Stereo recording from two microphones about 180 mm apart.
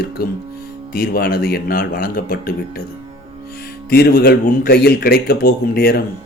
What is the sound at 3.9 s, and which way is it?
A man's voice, 60° left (ahead or behind).